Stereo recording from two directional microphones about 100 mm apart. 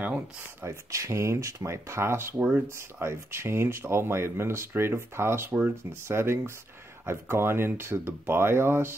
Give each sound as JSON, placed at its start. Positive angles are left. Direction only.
{"t": 0.0, "sound": "speech", "side_deg": -20}